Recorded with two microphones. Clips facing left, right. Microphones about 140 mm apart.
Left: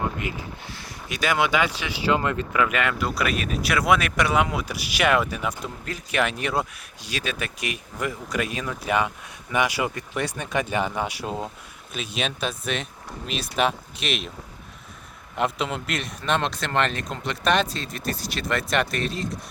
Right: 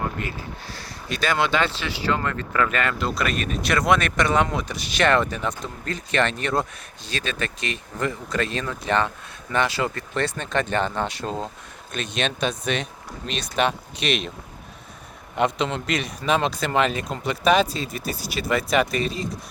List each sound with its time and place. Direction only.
0.2 s speech: 15° left (ahead or behind)
15.4 s speech: 5° left (ahead or behind)